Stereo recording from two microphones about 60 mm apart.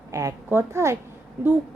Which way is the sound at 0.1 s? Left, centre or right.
Right.